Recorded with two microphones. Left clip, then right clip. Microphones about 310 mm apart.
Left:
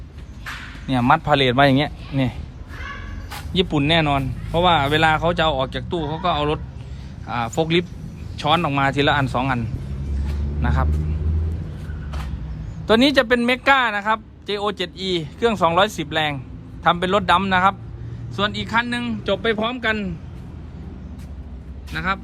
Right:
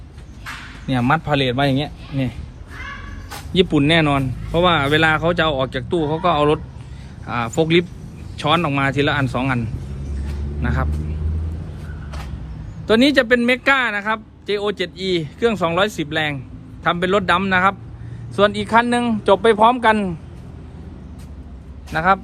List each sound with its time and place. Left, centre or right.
0.9 s speech: centre
3.2 s speech: centre
12.9 s speech: centre
21.8 s a man's voice: centre